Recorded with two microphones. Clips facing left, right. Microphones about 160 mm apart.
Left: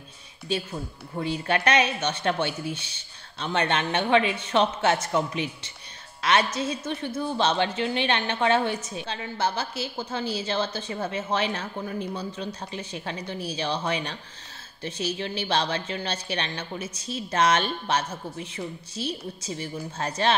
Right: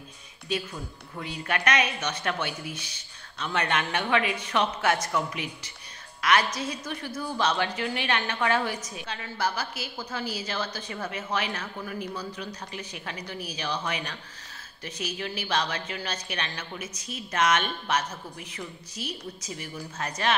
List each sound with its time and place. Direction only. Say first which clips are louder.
0.5 s a woman's voice: left 2 dB; 30° left (ahead or behind)